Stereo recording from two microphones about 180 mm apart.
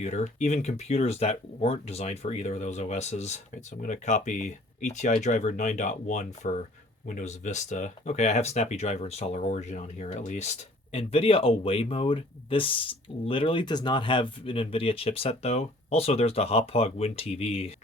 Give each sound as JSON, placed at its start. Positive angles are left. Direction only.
{"t": 0.0, "sound": "speech", "side_deg": 40}